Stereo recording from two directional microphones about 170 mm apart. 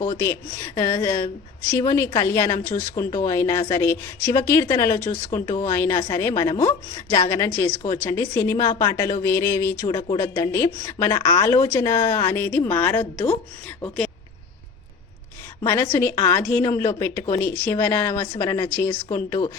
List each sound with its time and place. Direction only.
0.0 s a woman's voice: 15° left (ahead or behind)
15.6 s a woman's voice: 15° left (ahead or behind)